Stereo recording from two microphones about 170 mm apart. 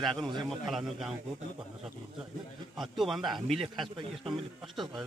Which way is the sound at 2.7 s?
Centre (ahead or behind).